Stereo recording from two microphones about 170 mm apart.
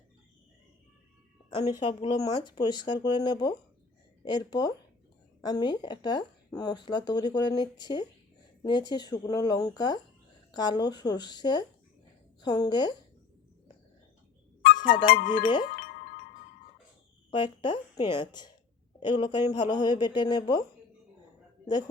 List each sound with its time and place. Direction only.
1.5 s speech: 30° left (ahead or behind)
14.8 s speech: 60° left (ahead or behind)
15.4 s speech: 25° left (ahead or behind)
15.7 s chime: 60° left (ahead or behind)
17.3 s speech: 25° left (ahead or behind)